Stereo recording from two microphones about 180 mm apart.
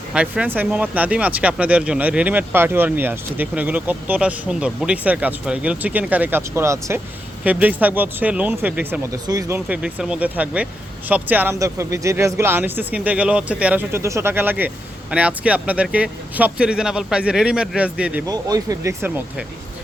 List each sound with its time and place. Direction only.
0.1 s speech: 5° right (ahead or behind)
9.6 s speech: 5° right (ahead or behind)
18.3 s speech: 20° right (ahead or behind)